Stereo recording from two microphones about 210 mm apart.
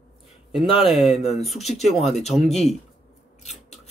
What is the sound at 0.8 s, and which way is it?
Speech, centre (ahead or behind).